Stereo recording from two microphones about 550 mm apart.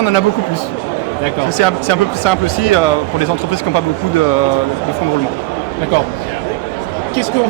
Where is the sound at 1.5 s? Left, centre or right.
Left.